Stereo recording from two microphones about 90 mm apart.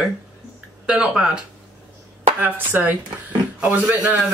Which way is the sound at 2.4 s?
20° right (ahead or behind).